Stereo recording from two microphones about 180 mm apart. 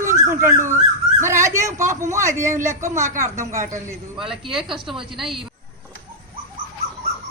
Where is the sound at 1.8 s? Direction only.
45° right (ahead or behind).